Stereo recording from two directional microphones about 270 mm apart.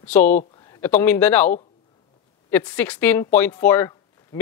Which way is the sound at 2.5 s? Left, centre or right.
Centre.